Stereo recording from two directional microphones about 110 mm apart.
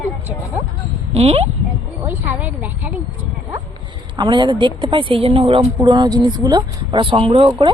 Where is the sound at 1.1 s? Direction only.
70° right (ahead or behind).